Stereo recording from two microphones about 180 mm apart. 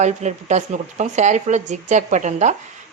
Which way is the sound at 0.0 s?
40° right (ahead or behind).